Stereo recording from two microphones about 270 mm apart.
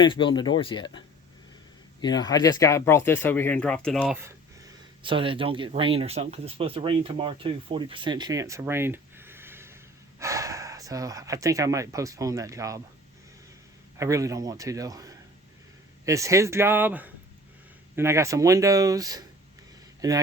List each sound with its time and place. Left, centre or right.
0.0 s speech: centre
14.0 s speech: centre